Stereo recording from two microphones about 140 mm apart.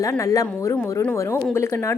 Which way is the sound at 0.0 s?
20° left (ahead or behind).